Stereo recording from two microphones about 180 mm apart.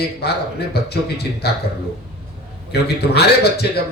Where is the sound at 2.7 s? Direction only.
65° left (ahead or behind).